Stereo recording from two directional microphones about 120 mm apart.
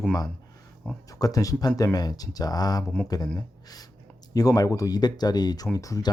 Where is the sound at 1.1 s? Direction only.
30° left (ahead or behind).